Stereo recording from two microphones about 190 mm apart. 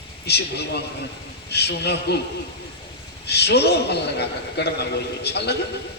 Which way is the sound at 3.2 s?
60° left (ahead or behind).